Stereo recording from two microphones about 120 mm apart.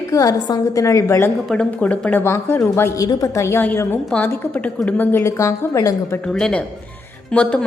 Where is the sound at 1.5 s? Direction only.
5° left (ahead or behind); by 6.2 s 25° left (ahead or behind).